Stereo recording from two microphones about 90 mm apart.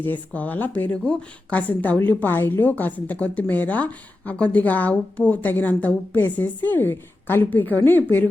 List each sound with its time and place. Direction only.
0.0 s a woman's voice: 20° left (ahead or behind)